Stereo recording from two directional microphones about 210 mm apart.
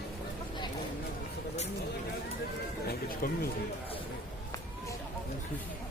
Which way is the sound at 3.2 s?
45° left (ahead or behind).